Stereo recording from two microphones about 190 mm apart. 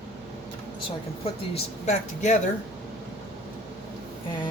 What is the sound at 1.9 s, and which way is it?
Speech, 40° left (ahead or behind).